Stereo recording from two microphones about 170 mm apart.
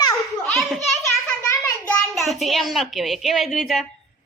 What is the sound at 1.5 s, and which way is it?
A child's voice, 10° left (ahead or behind).